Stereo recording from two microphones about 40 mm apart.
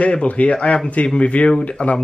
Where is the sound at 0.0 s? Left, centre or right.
Left.